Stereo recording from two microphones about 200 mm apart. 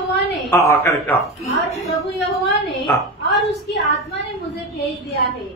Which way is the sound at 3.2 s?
60° left (ahead or behind).